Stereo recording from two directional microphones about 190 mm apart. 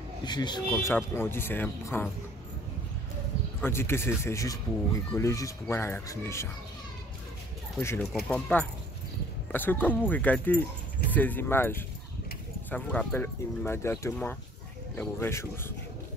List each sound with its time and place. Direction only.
0.2 s speech: 20° left (ahead or behind)
0.9 s speech: 10° left (ahead or behind)
3.6 s speech: 10° left (ahead or behind)
7.8 s speech: 15° left (ahead or behind)